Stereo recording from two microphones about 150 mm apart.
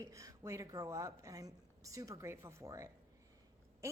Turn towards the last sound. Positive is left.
turn(degrees=-20)  # may be behind; listen again after turning